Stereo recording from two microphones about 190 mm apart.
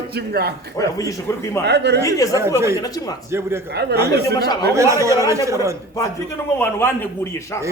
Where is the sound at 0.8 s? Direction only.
15° left (ahead or behind).